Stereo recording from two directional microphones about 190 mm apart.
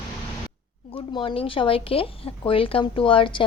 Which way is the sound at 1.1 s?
30° left (ahead or behind).